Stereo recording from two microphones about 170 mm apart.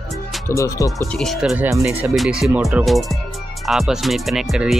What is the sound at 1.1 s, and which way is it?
Speech, 5° left (ahead or behind).